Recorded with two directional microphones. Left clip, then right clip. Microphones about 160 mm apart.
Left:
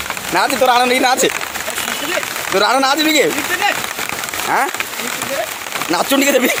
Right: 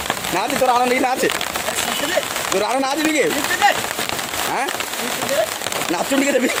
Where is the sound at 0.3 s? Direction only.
30° left (ahead or behind).